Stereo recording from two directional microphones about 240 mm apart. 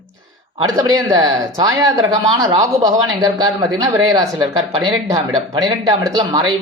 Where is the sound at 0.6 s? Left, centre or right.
Centre.